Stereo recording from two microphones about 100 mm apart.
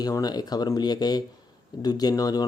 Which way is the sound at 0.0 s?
40° left (ahead or behind).